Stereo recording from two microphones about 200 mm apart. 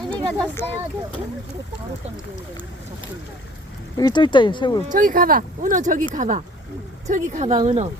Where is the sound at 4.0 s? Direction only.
20° left (ahead or behind).